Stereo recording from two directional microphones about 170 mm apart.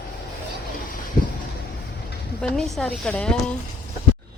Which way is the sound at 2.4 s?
Centre (ahead or behind).